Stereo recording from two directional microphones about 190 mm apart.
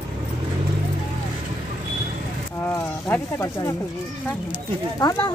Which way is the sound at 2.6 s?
15° left (ahead or behind).